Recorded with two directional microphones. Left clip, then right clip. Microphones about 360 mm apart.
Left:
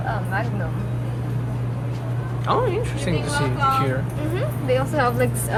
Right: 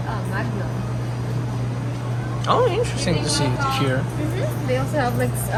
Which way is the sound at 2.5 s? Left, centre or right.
Centre.